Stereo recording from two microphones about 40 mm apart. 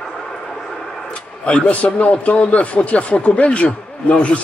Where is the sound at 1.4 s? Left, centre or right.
Left.